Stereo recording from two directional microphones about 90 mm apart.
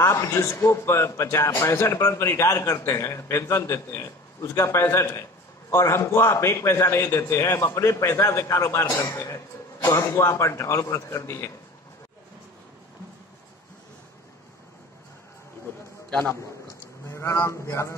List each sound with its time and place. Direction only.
0.0 s a man's voice: 30° left (ahead or behind)
16.1 s a man's voice: 15° left (ahead or behind)
17.1 s a man's voice: 30° left (ahead or behind)